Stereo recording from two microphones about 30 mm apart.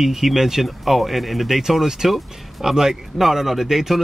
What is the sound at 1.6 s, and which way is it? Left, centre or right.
Speech, centre.